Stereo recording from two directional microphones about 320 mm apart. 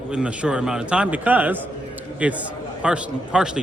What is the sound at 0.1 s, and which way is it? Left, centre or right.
A man's voice, centre.